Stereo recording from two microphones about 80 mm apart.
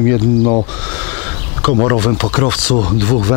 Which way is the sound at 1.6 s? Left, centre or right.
Centre.